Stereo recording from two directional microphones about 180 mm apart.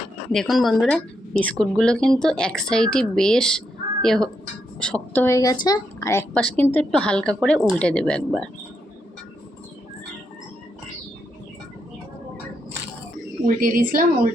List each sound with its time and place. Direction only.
0.3 s a woman's voice: centre (ahead or behind)
13.4 s a woman's voice: 50° right (ahead or behind)